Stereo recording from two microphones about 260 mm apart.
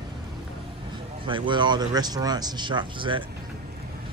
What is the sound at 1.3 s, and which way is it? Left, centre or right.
Speech, centre.